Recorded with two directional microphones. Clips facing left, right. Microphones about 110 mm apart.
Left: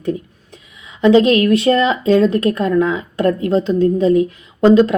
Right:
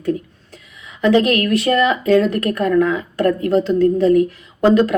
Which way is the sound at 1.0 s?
25° left (ahead or behind).